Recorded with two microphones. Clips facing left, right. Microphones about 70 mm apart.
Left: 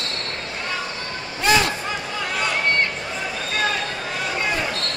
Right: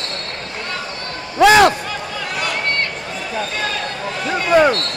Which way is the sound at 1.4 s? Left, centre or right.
Right.